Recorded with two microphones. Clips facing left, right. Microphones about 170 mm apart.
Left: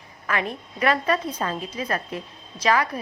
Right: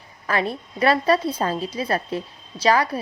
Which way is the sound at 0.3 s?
35° right (ahead or behind).